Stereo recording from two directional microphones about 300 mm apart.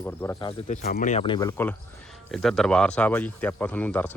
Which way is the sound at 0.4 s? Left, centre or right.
Left.